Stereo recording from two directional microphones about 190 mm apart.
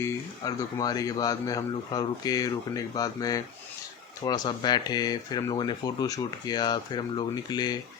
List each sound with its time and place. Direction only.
0.0 s speech: 20° left (ahead or behind)